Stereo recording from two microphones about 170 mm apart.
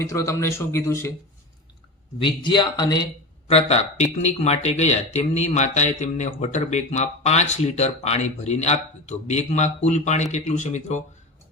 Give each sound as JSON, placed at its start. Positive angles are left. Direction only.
{"t": 0.0, "sound": "a man's voice", "side_deg": 15}
{"t": 2.1, "sound": "speech", "side_deg": 30}
{"t": 3.4, "sound": "speech", "side_deg": 40}